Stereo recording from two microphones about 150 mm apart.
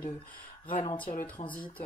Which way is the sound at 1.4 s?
45° left (ahead or behind).